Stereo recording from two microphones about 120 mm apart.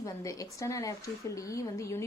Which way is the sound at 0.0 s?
30° left (ahead or behind).